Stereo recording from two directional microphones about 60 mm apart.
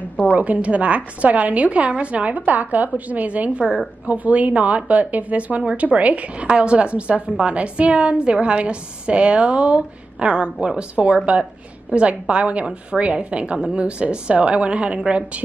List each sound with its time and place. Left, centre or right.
0.3 s a woman's voice: right